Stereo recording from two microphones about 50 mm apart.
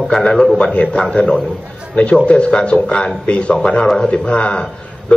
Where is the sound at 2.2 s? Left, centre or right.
Left.